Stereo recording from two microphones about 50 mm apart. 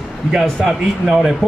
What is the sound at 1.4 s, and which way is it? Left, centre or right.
Speech, centre.